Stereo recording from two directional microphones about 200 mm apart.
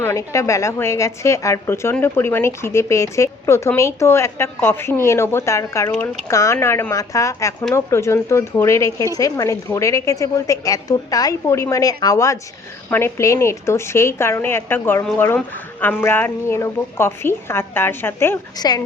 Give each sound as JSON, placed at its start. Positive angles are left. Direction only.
{"t": 0.0, "sound": "a woman's voice", "side_deg": 15}